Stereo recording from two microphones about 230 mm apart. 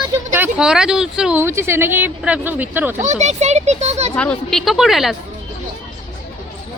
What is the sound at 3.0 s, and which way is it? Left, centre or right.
A child's voice, right.